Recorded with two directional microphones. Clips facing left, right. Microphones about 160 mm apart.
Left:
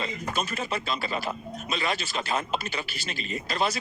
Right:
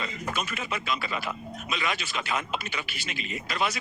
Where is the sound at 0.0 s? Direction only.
35° left (ahead or behind).